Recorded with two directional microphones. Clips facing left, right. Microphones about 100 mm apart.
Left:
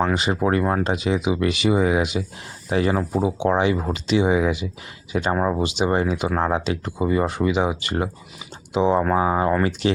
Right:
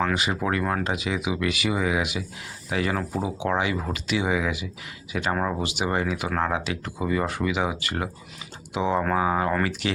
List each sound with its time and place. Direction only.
0.0 s speech: 30° left (ahead or behind)